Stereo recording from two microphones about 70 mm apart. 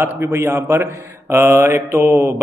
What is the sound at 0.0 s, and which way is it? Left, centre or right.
Speech, right.